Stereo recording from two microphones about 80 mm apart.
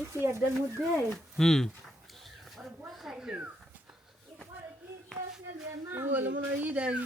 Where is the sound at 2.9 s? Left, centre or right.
Centre.